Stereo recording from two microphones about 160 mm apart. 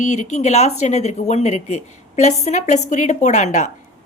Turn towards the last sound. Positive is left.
turn(degrees=45)  # may be behind; listen again after turning